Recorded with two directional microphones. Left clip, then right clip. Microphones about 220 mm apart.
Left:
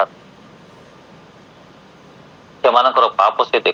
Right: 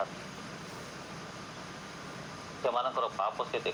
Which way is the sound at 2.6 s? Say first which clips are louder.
Left 19 dB; 40° left (ahead or behind).